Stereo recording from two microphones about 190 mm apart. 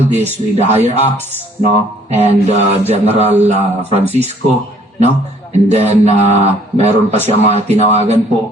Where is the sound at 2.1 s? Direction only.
35° right (ahead or behind).